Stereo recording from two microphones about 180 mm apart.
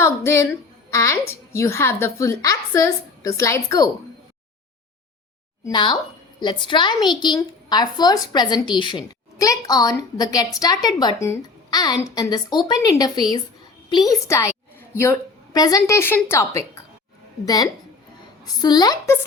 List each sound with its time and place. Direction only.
0.0 s a woman's voice: 15° left (ahead or behind)
5.6 s a woman's voice: 25° left (ahead or behind)